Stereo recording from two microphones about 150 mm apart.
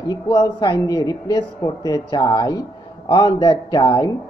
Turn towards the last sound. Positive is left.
turn(degrees=25)  # may be behind; listen again after turning